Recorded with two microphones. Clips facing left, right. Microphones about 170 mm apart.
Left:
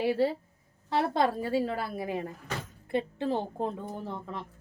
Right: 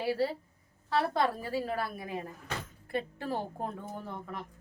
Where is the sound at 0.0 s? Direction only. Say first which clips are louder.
Left 4 dB; 25° left (ahead or behind).